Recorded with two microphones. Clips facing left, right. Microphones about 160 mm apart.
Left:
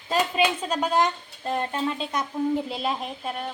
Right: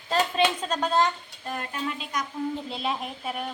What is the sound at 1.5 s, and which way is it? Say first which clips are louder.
Speech: left 5 dB; 30° left (ahead or behind).